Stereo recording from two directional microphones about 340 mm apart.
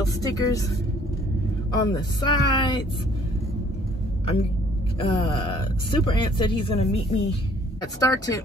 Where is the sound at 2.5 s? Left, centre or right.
Centre.